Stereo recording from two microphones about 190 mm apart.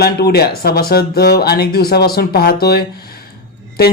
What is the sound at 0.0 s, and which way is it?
Speech, 55° left (ahead or behind).